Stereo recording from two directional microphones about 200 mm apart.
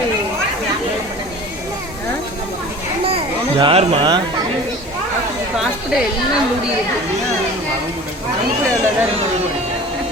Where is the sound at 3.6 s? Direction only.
30° right (ahead or behind).